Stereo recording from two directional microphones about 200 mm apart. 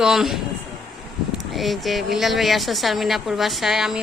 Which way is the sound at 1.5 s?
Centre (ahead or behind).